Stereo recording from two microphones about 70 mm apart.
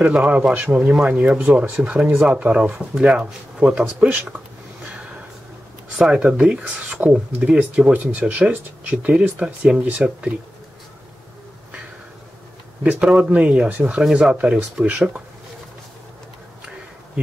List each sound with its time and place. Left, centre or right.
0.1 s speech: centre
3.0 s speech: centre
4.1 s speech: right
5.9 s speech: centre
13.2 s speech: centre